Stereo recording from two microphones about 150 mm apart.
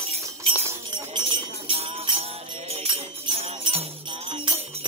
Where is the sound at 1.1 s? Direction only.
35° right (ahead or behind).